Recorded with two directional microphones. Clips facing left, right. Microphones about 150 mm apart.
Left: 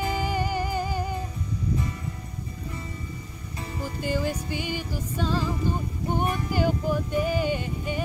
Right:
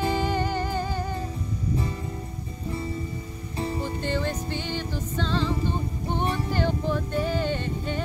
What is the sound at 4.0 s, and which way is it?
Music, 10° left (ahead or behind).